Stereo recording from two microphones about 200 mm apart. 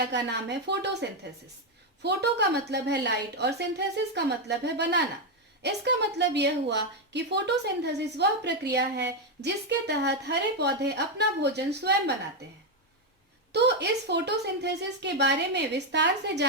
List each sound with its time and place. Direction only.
0.0 s a woman's voice: 55° right (ahead or behind)
2.0 s a woman's voice: 55° right (ahead or behind)
13.5 s a woman's voice: 60° right (ahead or behind)